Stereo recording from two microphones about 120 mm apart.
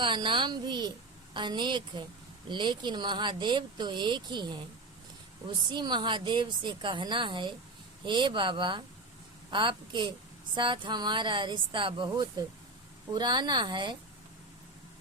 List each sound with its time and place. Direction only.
0.0 s speech: 40° right (ahead or behind)
5.6 s speech: 40° right (ahead or behind)